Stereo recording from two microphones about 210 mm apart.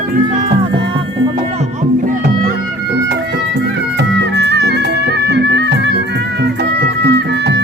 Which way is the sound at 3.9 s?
55° right (ahead or behind).